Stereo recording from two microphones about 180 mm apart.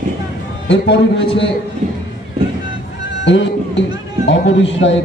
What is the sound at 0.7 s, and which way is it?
Speech, 75° left (ahead or behind).